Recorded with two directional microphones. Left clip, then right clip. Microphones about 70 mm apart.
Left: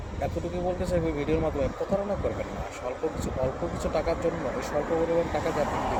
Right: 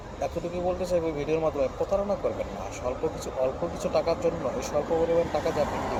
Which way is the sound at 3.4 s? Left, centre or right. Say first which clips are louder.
Right 2 dB; left.